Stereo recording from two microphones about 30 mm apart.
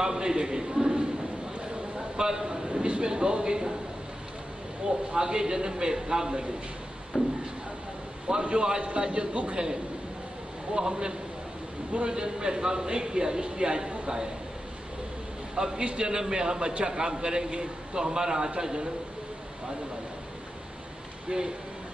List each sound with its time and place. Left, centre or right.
0.0 s a man's voice: right
2.1 s a man's voice: right
4.8 s a man's voice: right
7.1 s a sound: centre
8.3 s a man's voice: right
9.3 s a man's voice: right
10.7 s a man's voice: right
15.5 s a man's voice: right
15.8 s a man's voice: right
16.1 s a man's voice: right
21.3 s a man's voice: right